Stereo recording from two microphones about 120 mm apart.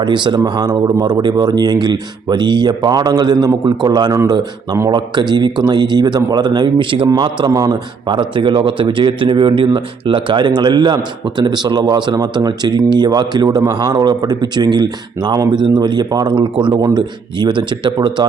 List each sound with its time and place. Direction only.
0.0 s speech: 40° right (ahead or behind)